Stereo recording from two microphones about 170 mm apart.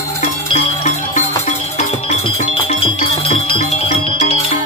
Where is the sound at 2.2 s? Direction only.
30° left (ahead or behind).